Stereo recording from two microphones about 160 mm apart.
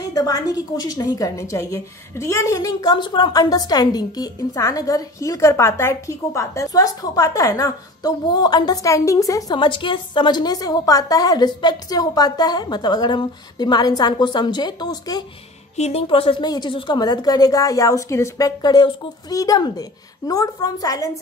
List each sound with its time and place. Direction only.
0.1 s a woman's voice: 25° left (ahead or behind)
15.7 s a woman's voice: 40° left (ahead or behind); by 21.2 s 20° left (ahead or behind)